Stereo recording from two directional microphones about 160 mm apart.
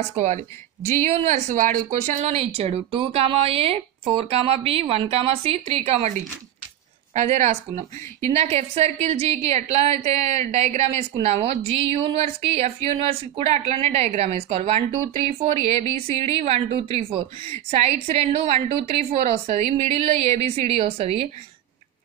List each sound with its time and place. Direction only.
0.2 s speech: 45° right (ahead or behind)
2.0 s speech: 45° right (ahead or behind)
7.2 s speech: 45° right (ahead or behind)